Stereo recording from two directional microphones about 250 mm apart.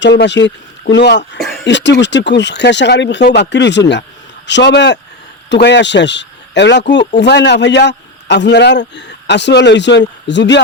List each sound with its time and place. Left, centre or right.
0.0 s a man's voice: left